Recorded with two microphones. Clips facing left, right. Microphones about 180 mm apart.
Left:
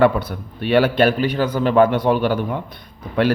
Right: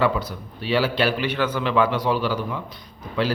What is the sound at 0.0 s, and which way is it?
A man's voice, 60° left (ahead or behind).